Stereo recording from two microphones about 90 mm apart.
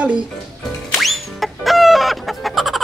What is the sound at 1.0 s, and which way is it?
Chicken, centre (ahead or behind).